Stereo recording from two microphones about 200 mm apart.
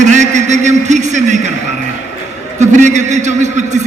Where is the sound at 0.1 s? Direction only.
35° right (ahead or behind).